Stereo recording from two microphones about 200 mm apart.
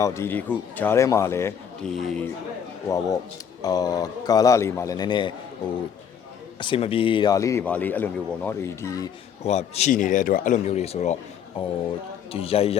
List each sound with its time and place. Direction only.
0.0 s speech: 15° left (ahead or behind)
3.6 s speech: 20° left (ahead or behind)
6.6 s speech: 25° left (ahead or behind)
9.4 s speech: 30° left (ahead or behind)